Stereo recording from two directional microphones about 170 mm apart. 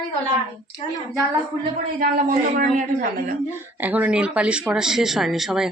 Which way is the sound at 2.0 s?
55° right (ahead or behind).